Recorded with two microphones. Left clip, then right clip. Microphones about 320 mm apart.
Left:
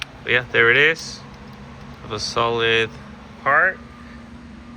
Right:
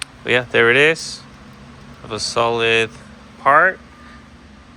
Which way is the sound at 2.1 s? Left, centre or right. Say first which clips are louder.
Right 3 dB; centre.